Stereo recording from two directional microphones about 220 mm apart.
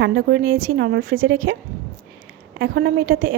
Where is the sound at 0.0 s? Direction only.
50° right (ahead or behind).